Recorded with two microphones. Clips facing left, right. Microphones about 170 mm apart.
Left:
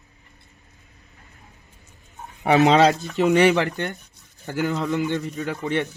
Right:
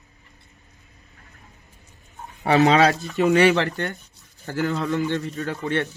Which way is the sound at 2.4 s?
20° left (ahead or behind).